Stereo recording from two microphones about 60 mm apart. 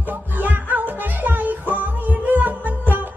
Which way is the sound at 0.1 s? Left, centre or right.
Right.